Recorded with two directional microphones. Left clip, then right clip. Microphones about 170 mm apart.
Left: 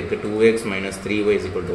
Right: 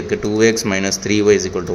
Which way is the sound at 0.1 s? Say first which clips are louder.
Right 2 dB; 40° right (ahead or behind).